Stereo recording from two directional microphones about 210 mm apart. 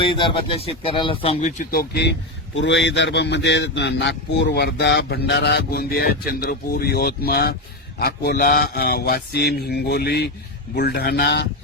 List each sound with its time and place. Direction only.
0.0 s speech: 25° left (ahead or behind); by 11.4 s 50° left (ahead or behind)